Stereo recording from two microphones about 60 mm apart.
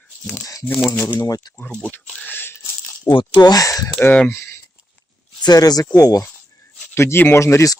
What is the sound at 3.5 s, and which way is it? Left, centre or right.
Speech, left.